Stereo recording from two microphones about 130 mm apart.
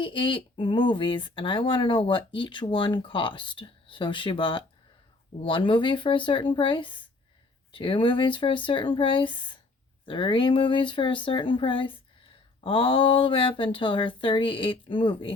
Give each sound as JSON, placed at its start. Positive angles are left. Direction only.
{"t": 0.0, "sound": "speech", "side_deg": 40}